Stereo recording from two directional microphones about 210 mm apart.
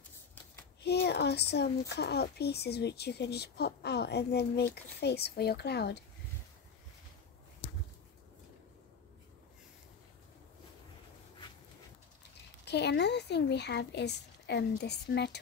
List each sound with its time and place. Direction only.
0.8 s speech: 50° left (ahead or behind)
12.6 s speech: 50° left (ahead or behind)